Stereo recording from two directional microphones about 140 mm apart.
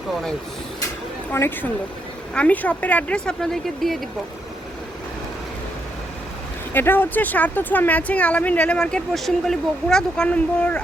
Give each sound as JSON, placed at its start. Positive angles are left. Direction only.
{"t": 1.3, "sound": "speech", "side_deg": 15}
{"t": 6.7, "sound": "speech", "side_deg": 15}